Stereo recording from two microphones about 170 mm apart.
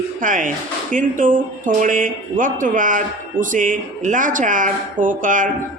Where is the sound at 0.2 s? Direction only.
50° right (ahead or behind).